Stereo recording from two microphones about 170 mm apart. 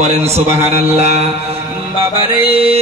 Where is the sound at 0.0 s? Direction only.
40° right (ahead or behind).